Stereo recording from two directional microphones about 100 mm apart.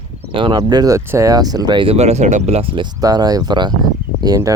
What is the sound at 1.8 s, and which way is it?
Speech, 90° right.